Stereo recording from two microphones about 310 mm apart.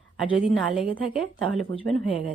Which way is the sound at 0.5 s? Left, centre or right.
Centre.